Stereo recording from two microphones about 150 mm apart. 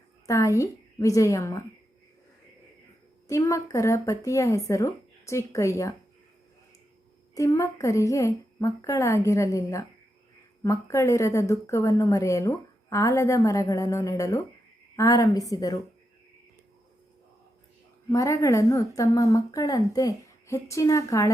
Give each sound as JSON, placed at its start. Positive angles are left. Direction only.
{"t": 0.3, "sound": "a woman's voice", "side_deg": 20}
{"t": 3.2, "sound": "a woman's voice", "side_deg": 20}
{"t": 7.3, "sound": "a woman's voice", "side_deg": 20}
{"t": 18.1, "sound": "a woman's voice", "side_deg": 20}